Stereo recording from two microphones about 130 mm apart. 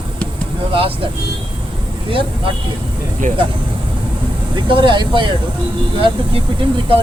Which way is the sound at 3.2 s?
80° right.